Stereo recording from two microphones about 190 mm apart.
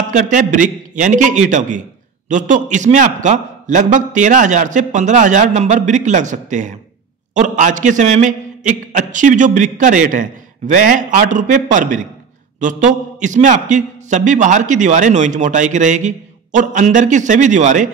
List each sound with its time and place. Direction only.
0.1 s a man's voice: 40° right (ahead or behind)